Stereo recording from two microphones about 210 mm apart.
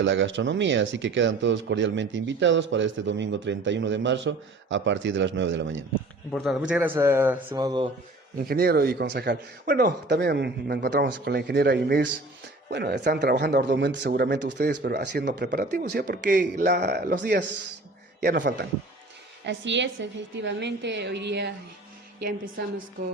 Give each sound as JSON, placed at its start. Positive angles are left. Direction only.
{"t": 0.0, "sound": "speech", "side_deg": -60}
{"t": 6.3, "sound": "speech", "side_deg": 0}
{"t": 8.4, "sound": "speech", "side_deg": -50}
{"t": 19.5, "sound": "speech", "side_deg": -60}